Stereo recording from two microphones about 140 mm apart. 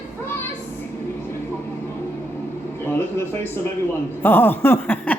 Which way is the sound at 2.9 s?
15° left (ahead or behind).